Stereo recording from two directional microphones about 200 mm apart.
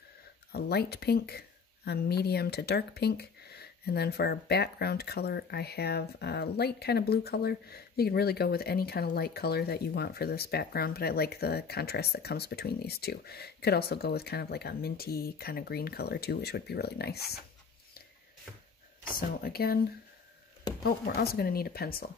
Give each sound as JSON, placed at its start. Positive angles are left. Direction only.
{"t": 0.5, "sound": "speech", "side_deg": 55}
{"t": 19.1, "sound": "speech", "side_deg": 50}
{"t": 20.8, "sound": "speech", "side_deg": 55}